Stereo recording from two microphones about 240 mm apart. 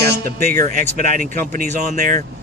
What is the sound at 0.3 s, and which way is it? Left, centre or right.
Speech, right.